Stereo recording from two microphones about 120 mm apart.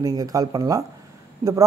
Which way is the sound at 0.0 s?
30° right (ahead or behind).